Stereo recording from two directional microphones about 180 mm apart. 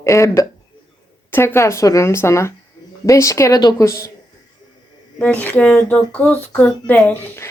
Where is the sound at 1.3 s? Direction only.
10° left (ahead or behind).